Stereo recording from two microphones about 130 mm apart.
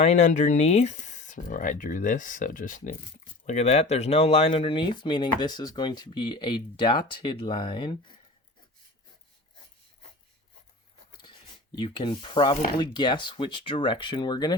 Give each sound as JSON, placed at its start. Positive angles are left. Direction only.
{"t": 0.0, "sound": "speech", "side_deg": 60}
{"t": 3.4, "sound": "speech", "side_deg": 60}
{"t": 11.2, "sound": "a sound", "side_deg": 35}
{"t": 12.8, "sound": "speech", "side_deg": 35}